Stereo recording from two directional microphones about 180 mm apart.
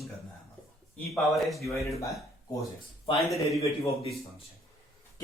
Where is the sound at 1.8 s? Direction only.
15° left (ahead or behind).